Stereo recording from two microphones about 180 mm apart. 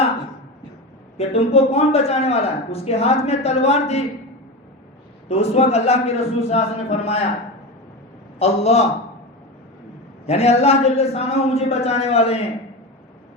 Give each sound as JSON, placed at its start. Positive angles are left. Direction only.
{"t": 1.3, "sound": "a man's voice", "side_deg": 35}
{"t": 5.3, "sound": "a man's voice", "side_deg": 35}
{"t": 8.4, "sound": "a man's voice", "side_deg": 35}
{"t": 10.2, "sound": "a man's voice", "side_deg": 35}